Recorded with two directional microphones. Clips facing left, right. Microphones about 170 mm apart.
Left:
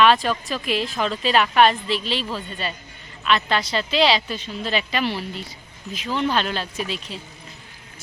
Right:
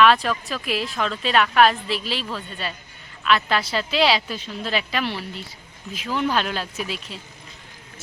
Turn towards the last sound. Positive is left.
turn(degrees=0)  # may be behind; listen again after turning